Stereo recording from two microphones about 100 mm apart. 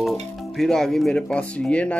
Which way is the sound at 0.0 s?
Centre (ahead or behind).